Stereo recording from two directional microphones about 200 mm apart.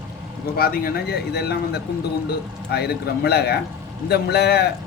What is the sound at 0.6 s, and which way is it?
A man's voice, 45° left (ahead or behind).